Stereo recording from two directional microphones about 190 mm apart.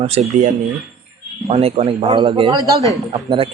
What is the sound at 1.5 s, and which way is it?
Speech, 30° right (ahead or behind).